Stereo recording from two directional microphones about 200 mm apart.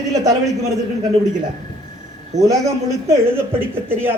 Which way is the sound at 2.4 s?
15° right (ahead or behind).